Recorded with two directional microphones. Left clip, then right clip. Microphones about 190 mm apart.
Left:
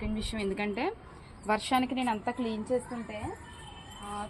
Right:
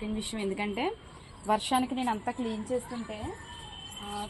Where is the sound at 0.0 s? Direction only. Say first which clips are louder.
Even; centre (ahead or behind).